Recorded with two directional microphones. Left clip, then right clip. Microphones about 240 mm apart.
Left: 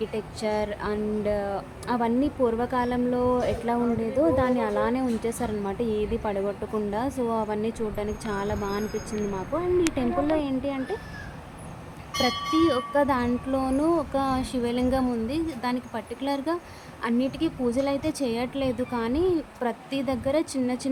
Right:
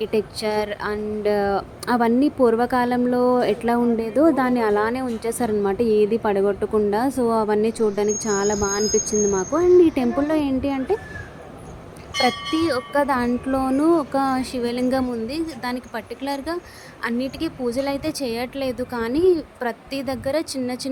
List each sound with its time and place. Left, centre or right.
0.0 s speech: centre
12.6 s speech: centre